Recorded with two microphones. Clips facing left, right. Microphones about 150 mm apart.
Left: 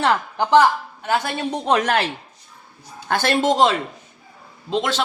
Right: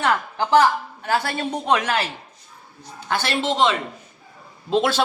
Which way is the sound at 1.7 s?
50° left (ahead or behind).